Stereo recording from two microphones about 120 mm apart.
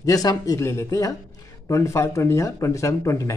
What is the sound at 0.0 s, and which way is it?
Speech, 30° left (ahead or behind).